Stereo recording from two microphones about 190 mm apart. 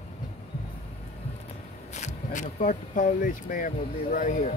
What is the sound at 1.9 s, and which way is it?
Speech, 40° left (ahead or behind).